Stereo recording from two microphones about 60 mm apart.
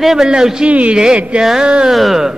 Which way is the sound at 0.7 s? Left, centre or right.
Right.